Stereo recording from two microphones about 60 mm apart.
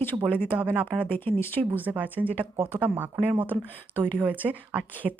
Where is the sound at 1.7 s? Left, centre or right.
Right.